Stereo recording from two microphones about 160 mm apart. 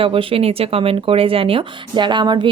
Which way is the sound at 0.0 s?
35° right (ahead or behind).